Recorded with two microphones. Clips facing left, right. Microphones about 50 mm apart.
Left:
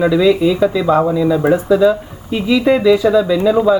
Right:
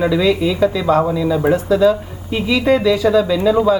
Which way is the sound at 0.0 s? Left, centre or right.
Centre.